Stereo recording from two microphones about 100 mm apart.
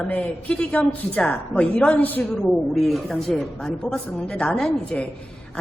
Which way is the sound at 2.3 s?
Centre (ahead or behind).